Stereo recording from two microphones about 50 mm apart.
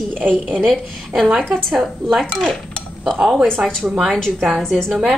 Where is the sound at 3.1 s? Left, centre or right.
Centre.